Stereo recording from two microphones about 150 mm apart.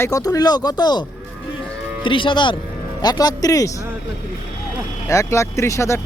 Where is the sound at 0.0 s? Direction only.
25° left (ahead or behind).